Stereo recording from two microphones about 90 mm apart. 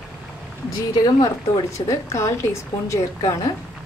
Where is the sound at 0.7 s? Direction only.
45° left (ahead or behind).